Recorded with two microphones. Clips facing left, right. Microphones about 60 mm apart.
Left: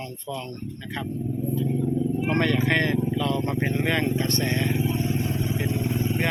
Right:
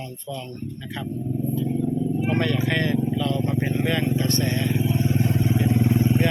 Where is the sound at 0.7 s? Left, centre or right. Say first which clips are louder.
Left 2 dB; left.